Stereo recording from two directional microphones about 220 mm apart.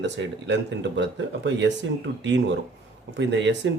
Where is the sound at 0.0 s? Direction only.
55° right (ahead or behind).